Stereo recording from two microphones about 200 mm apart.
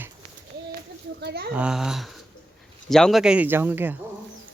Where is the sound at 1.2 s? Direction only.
55° right (ahead or behind).